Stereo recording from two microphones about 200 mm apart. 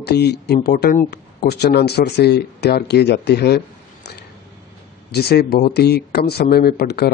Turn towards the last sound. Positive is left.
turn(degrees=55)  # may be behind; listen again after turning